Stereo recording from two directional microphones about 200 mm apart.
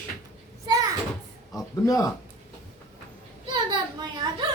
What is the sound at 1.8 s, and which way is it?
Speech, 15° left (ahead or behind).